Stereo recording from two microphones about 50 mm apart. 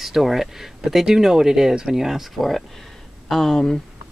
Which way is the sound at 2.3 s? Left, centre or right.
Centre.